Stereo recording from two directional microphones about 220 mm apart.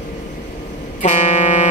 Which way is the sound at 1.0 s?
30° left (ahead or behind).